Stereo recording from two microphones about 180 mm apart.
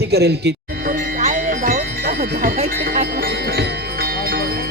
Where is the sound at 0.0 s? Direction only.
65° right (ahead or behind).